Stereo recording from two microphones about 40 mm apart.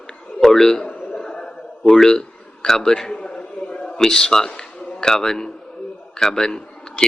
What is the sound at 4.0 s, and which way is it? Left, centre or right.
A man's voice, centre.